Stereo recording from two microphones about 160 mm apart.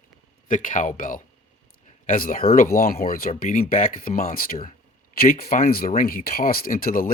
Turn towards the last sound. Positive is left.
turn(degrees=60)  # may be behind; listen again after turning